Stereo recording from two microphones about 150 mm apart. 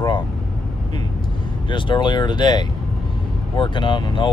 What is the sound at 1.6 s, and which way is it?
Speech, 35° left (ahead or behind).